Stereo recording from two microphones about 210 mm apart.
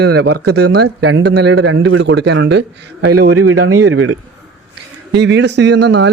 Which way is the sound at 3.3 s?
90° right.